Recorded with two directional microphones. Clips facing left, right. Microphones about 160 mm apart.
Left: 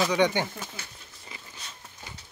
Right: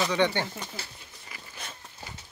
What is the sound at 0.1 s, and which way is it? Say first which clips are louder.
Speech: left 2 dB; 15° left (ahead or behind).